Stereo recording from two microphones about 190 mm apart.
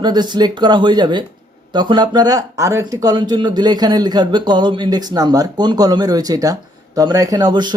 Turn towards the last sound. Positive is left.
turn(degrees=-25)  # may be behind; listen again after turning